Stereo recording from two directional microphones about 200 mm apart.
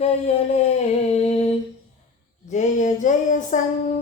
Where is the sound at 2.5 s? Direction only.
40° left (ahead or behind).